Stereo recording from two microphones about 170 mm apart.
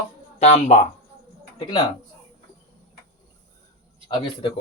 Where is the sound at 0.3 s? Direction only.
40° left (ahead or behind).